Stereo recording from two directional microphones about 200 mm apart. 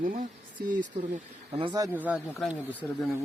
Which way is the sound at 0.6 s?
50° right (ahead or behind).